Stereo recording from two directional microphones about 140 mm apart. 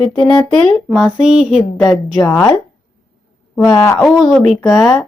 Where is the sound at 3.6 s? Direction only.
5° left (ahead or behind).